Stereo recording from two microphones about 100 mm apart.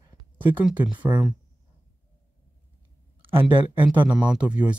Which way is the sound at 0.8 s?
50° right (ahead or behind).